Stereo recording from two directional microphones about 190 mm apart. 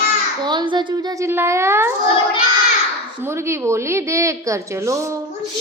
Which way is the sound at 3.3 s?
15° right (ahead or behind).